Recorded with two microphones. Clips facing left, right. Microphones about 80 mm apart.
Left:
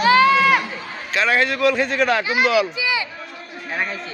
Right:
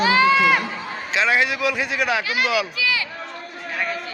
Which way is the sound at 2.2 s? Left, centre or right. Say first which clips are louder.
Left 4 dB; left.